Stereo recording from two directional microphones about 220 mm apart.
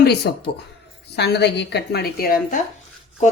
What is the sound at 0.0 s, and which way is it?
A woman's voice, 50° left (ahead or behind).